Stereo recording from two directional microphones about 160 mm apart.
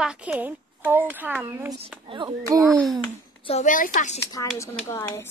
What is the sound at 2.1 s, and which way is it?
Speech, 30° right (ahead or behind).